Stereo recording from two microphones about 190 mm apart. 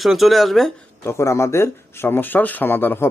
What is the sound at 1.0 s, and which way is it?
Speech, 15° left (ahead or behind).